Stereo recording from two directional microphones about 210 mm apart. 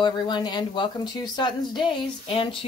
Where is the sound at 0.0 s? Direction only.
20° left (ahead or behind).